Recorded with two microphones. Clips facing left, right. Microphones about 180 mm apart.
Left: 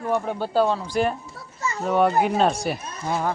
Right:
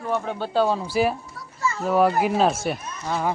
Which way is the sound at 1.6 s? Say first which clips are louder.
Right 2 dB; 20° left (ahead or behind).